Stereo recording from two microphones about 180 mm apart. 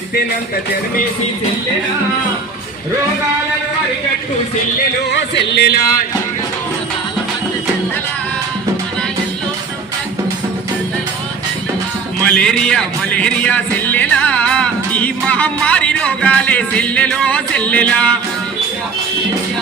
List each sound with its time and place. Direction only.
5.1 s music: 70° left (ahead or behind); by 6.1 s 55° left (ahead or behind)
12.2 s a man's voice: 5° left (ahead or behind)